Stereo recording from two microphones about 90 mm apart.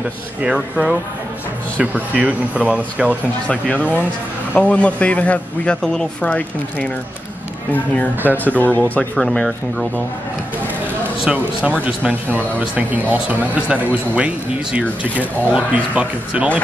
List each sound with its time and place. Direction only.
0.4 s speech: 10° right (ahead or behind)
3.4 s a man's voice: 15° left (ahead or behind)
8.2 s speech: 20° right (ahead or behind)
8.5 s speech: 20° left (ahead or behind)
9.1 s speech: 5° left (ahead or behind)
11.2 s speech: 15° right (ahead or behind)